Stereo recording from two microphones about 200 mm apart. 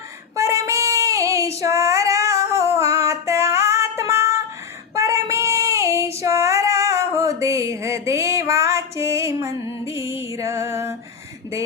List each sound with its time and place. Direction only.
0.3 s child singing: 15° right (ahead or behind)
2.7 s female singing: 15° right (ahead or behind)
4.9 s child singing: 15° right (ahead or behind)